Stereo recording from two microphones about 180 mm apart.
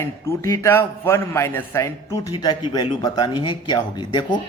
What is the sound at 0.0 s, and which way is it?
A man's voice, 15° left (ahead or behind).